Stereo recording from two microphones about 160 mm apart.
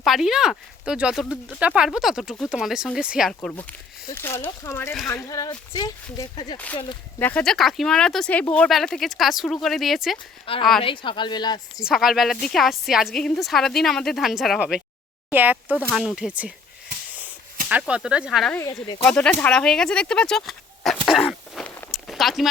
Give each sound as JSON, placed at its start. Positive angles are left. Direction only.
{"t": 0.0, "sound": "speech", "side_deg": 0}
{"t": 3.5, "sound": "speech", "side_deg": 10}
{"t": 7.2, "sound": "speech", "side_deg": 10}
{"t": 10.4, "sound": "speech", "side_deg": 35}
{"t": 11.8, "sound": "speech", "side_deg": 0}
{"t": 17.7, "sound": "speech", "side_deg": -10}